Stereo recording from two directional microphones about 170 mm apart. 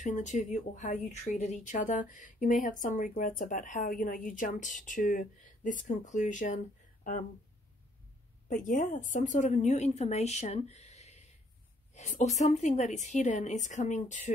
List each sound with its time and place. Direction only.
0.0 s speech: 45° left (ahead or behind)
8.5 s speech: 45° left (ahead or behind)